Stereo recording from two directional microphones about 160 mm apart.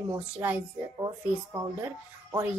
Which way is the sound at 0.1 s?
15° right (ahead or behind).